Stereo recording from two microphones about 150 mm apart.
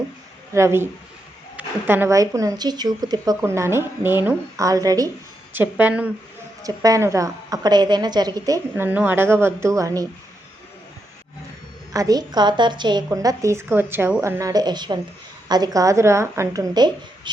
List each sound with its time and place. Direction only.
0.5 s a woman's voice: 15° right (ahead or behind)
5.5 s a woman's voice: 10° right (ahead or behind)
6.6 s speech: 25° right (ahead or behind)
8.7 s a woman's voice: 10° right (ahead or behind)
11.9 s speech: 25° right (ahead or behind)